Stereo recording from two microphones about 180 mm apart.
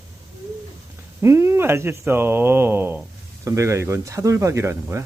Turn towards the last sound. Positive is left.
turn(degrees=-15)  # may be behind; listen again after turning